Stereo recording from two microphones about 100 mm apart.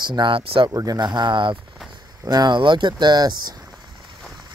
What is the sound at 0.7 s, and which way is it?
Speech, 35° right (ahead or behind).